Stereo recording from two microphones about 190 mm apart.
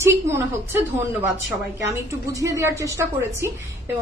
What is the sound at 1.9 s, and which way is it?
Speech, 15° right (ahead or behind).